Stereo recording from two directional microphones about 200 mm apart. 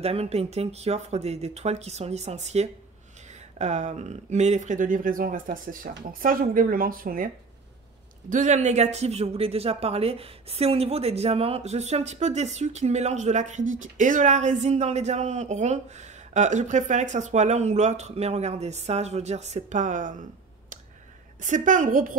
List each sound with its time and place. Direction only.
0.0 s speech: 30° right (ahead or behind)
8.3 s speech: 35° right (ahead or behind)
21.4 s speech: 40° right (ahead or behind)